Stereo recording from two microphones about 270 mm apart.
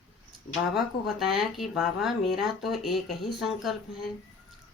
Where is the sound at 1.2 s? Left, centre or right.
Centre.